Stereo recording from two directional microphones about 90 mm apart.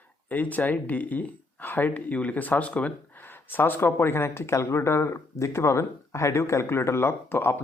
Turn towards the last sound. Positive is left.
turn(degrees=25)  # may be behind; listen again after turning